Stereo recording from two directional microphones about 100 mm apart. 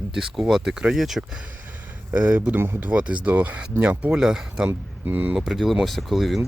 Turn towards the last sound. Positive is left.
turn(degrees=0)  # may be behind; listen again after turning